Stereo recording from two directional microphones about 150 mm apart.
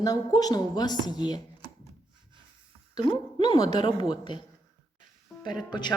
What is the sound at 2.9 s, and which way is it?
Speech, 30° left (ahead or behind).